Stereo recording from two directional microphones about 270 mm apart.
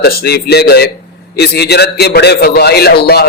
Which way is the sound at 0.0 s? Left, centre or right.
Left.